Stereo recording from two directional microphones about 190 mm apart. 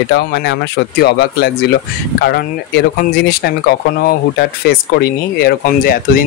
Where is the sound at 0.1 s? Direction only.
60° left (ahead or behind).